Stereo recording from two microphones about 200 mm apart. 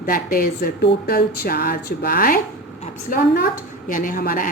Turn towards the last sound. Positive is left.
turn(degrees=45)  # may be behind; listen again after turning